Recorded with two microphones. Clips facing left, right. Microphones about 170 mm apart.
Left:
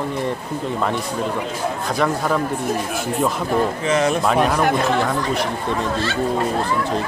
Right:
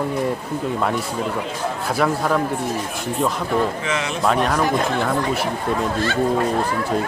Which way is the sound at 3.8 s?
40° left (ahead or behind).